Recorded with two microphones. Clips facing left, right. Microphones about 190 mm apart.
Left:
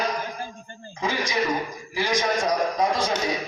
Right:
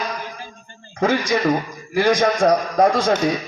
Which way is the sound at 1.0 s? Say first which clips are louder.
Right 7 dB; 55° right (ahead or behind).